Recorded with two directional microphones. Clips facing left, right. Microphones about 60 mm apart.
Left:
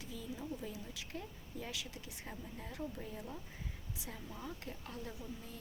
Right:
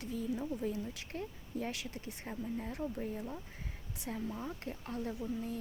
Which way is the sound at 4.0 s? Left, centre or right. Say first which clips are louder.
Right 9 dB; right.